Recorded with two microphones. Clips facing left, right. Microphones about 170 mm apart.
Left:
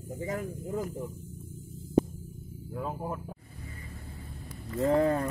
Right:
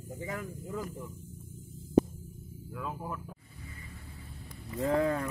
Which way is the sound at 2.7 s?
35° left (ahead or behind).